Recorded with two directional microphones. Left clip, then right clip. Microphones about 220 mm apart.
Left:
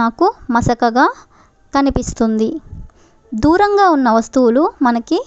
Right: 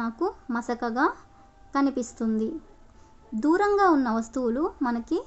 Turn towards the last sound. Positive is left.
turn(degrees=40)  # may be behind; listen again after turning